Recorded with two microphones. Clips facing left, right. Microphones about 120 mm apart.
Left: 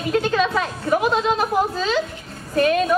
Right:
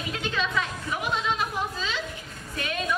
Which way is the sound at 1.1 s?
40° left (ahead or behind).